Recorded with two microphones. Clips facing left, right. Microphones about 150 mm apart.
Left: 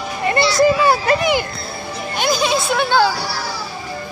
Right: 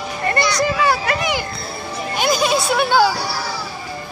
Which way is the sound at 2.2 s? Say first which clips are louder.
Even; centre (ahead or behind).